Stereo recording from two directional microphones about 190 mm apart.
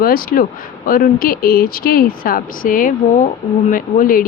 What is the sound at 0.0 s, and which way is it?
Speech, 50° left (ahead or behind).